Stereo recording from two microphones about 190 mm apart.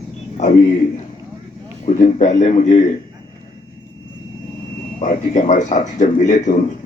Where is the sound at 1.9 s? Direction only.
40° left (ahead or behind).